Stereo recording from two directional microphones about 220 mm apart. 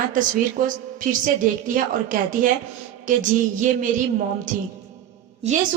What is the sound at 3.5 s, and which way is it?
Speech, 35° right (ahead or behind).